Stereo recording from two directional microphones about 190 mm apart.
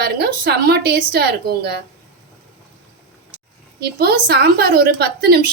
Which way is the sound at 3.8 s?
55° right (ahead or behind).